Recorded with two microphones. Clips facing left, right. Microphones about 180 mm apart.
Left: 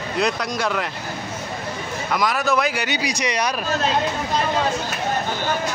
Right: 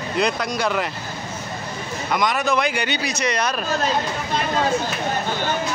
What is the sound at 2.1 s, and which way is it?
Speech, centre (ahead or behind).